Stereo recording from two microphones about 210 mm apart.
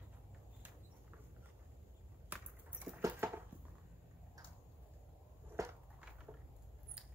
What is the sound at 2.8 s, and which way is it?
Patter, 10° right (ahead or behind).